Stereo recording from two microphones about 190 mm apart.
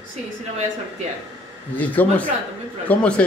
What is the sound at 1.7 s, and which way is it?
Speech, 10° left (ahead or behind).